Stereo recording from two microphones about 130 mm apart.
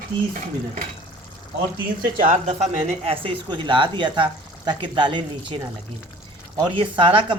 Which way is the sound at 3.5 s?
40° right (ahead or behind).